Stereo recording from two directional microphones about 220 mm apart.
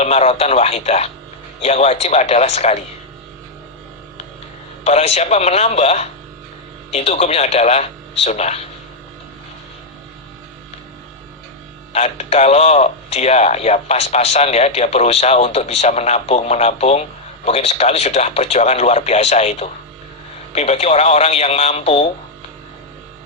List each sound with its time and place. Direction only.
0.0 s a man's voice: 30° left (ahead or behind)
4.8 s a man's voice: 30° left (ahead or behind)
11.9 s a man's voice: 30° left (ahead or behind)